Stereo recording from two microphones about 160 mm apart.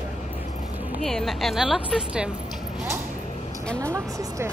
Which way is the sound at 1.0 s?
Centre (ahead or behind).